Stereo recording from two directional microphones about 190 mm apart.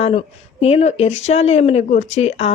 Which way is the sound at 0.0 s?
30° left (ahead or behind).